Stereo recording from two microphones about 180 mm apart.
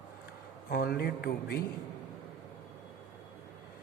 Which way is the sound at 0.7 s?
60° left (ahead or behind).